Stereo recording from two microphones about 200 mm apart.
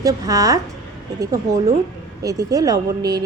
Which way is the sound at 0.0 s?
15° right (ahead or behind).